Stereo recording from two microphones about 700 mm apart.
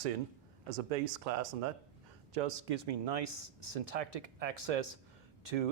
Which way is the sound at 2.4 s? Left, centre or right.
Right.